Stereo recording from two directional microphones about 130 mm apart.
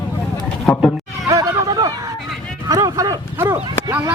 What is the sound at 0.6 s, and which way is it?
Speech, 5° left (ahead or behind).